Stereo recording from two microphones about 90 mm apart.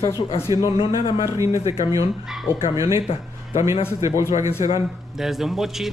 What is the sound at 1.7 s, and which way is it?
Speech, 40° right (ahead or behind).